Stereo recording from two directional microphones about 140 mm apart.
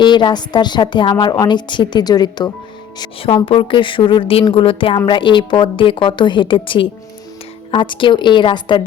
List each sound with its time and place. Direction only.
0.0 s speech: 35° left (ahead or behind)